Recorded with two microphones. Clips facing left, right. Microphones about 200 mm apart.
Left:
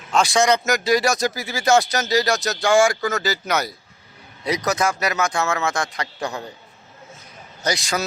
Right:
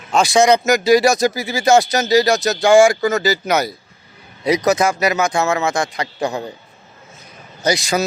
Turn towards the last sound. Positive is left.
turn(degrees=-5)  # may be behind; listen again after turning